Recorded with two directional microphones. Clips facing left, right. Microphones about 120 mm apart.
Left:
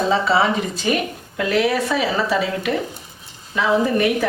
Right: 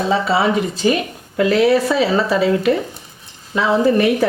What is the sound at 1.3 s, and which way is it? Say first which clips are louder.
Speech: right 5 dB; 35° right (ahead or behind).